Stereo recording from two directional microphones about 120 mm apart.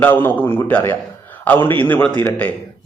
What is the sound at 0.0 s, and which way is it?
A man's voice, 15° left (ahead or behind).